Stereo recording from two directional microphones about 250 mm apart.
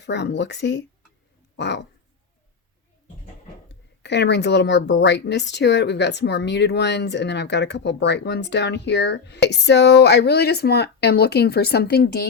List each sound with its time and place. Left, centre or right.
0.0 s speech: left
4.0 s speech: left